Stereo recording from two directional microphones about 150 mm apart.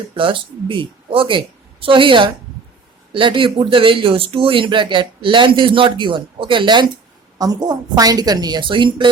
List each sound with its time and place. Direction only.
0.1 s speech: 35° right (ahead or behind)